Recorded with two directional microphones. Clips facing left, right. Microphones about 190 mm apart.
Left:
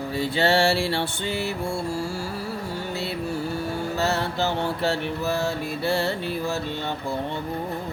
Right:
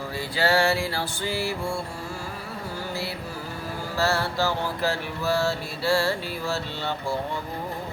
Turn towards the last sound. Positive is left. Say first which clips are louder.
# left 2 dB
turn(degrees=15)  # may be behind; listen again after turning